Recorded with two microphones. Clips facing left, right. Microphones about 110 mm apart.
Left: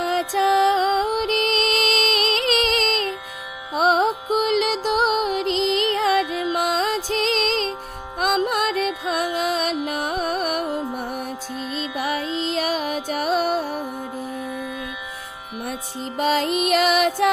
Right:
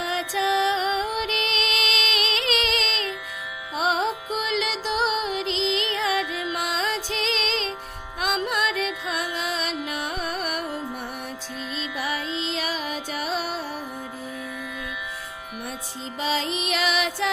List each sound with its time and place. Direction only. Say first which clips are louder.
0.0 s music: left 5 dB; 40° left (ahead or behind)
16.2 s music: left 6 dB; 50° left (ahead or behind)